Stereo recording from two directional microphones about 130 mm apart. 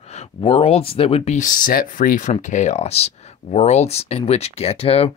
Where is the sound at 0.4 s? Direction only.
50° left (ahead or behind).